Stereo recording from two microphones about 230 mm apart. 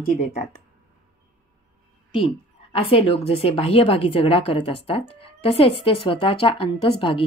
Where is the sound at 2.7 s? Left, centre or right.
Left.